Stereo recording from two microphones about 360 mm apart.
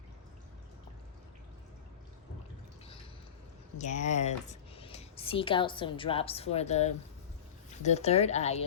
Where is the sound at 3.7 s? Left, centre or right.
Centre.